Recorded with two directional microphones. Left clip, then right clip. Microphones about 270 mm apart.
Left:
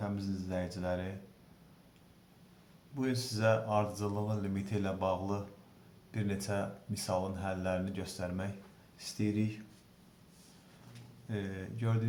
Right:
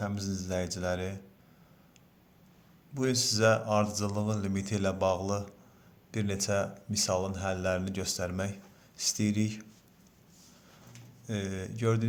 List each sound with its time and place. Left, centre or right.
0.0 s speech: right
2.9 s speech: right
11.3 s speech: right